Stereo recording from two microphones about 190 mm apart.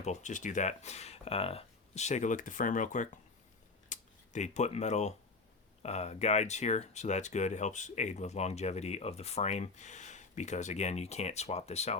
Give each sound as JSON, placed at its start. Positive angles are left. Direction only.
{"t": 0.0, "sound": "speech", "side_deg": 40}